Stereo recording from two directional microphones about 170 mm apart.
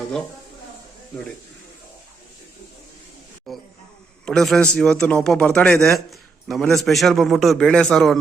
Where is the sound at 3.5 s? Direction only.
Centre (ahead or behind).